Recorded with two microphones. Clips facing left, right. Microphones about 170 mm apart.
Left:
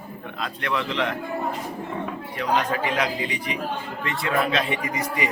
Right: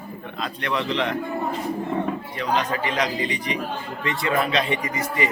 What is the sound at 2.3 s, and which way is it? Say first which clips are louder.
A man's voice: left 4 dB; 5° left (ahead or behind).